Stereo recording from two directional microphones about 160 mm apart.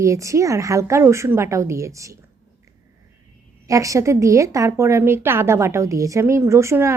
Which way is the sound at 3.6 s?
20° right (ahead or behind).